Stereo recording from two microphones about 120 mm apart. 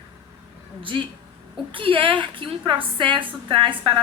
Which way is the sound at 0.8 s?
45° right (ahead or behind).